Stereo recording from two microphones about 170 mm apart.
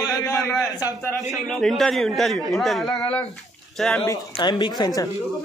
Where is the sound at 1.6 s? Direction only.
Centre (ahead or behind).